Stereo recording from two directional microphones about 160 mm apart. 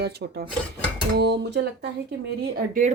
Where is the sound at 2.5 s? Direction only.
55° right (ahead or behind).